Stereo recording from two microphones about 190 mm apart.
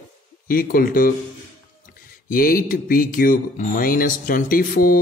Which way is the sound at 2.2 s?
50° left (ahead or behind).